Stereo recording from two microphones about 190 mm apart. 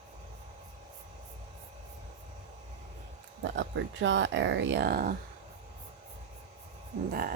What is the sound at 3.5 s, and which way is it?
Speech, 70° right (ahead or behind).